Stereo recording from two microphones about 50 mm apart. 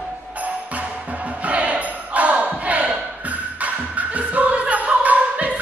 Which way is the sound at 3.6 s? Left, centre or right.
Right.